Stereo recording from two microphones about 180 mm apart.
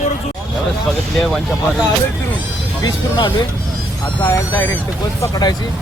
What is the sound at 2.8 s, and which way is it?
Speech, 25° left (ahead or behind).